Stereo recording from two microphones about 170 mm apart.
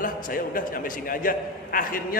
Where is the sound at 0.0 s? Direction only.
55° left (ahead or behind).